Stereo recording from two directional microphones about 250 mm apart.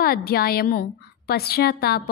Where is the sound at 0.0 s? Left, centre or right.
Left.